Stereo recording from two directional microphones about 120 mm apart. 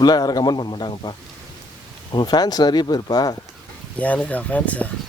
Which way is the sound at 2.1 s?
35° left (ahead or behind).